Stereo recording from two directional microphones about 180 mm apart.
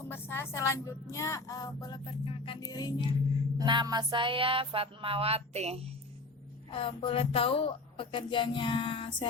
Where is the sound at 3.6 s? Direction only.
25° right (ahead or behind).